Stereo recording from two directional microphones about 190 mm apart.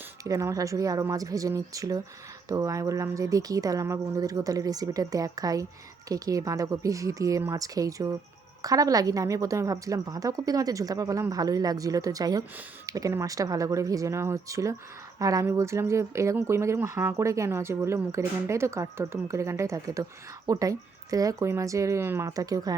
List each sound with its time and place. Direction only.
0.3 s a woman's voice: 15° right (ahead or behind)